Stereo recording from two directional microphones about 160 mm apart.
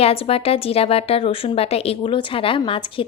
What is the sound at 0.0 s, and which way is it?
Speech, 40° left (ahead or behind).